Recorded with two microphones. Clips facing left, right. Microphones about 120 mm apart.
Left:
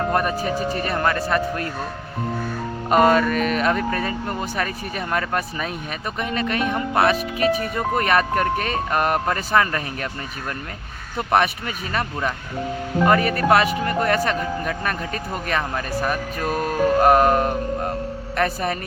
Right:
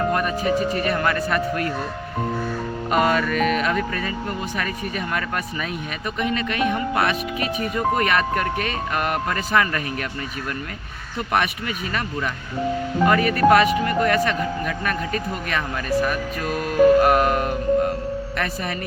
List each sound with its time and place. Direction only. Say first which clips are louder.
0.1 s speech: even; 40° left (ahead or behind)
2.9 s speech: left 4 dB; 40° left (ahead or behind)
11.3 s speech: left 3 dB; 35° left (ahead or behind)